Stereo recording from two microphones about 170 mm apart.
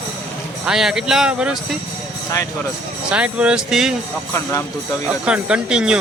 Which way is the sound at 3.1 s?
5° right (ahead or behind).